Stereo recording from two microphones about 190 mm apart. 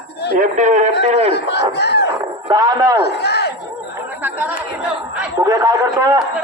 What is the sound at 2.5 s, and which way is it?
Speech, 20° right (ahead or behind).